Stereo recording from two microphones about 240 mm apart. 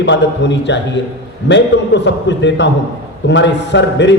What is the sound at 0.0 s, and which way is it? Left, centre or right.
A man's voice, left.